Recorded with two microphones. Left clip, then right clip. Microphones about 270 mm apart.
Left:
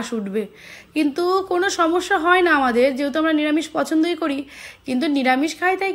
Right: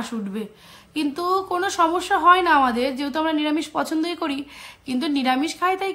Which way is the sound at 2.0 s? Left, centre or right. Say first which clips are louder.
Even; right.